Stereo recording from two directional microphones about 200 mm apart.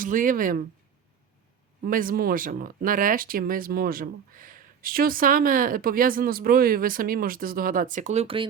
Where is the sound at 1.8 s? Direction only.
45° right (ahead or behind).